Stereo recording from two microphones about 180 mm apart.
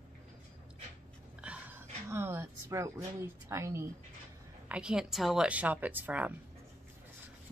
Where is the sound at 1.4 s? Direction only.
10° right (ahead or behind).